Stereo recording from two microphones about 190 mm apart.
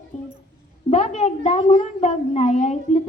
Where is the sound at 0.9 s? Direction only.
35° left (ahead or behind).